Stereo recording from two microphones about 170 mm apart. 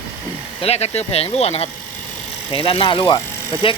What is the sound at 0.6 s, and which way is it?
Speech, 40° left (ahead or behind).